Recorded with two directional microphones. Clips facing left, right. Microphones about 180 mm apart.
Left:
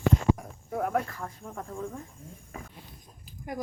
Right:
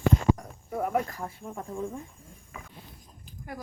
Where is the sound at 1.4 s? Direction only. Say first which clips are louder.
Right 3 dB; 10° right (ahead or behind).